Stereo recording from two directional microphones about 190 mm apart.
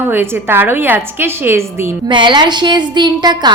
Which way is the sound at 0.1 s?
10° right (ahead or behind).